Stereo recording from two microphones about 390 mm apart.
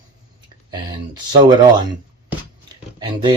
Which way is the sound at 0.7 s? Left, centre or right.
Centre.